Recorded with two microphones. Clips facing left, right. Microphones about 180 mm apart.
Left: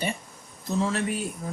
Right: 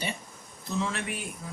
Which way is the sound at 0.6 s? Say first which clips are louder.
Left 5 dB; 40° left (ahead or behind).